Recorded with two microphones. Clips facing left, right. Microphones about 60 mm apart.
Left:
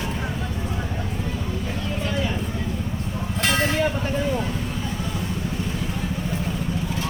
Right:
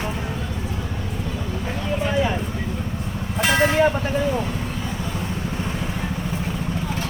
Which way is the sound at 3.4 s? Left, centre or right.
Centre.